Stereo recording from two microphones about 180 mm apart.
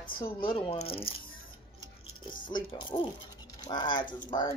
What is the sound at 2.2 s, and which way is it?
Speech, 25° left (ahead or behind).